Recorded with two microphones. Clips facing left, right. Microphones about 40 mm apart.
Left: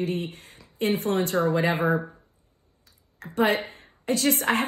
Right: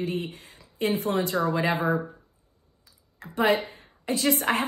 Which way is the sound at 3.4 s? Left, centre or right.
Left.